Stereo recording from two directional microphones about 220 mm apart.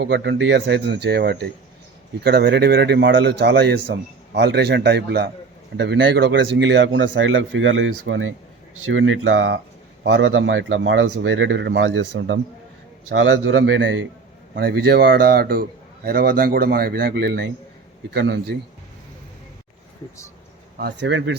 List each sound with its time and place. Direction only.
0.0 s speech: 55° right (ahead or behind)
14.5 s speech: 45° right (ahead or behind)
20.7 s speech: 50° right (ahead or behind)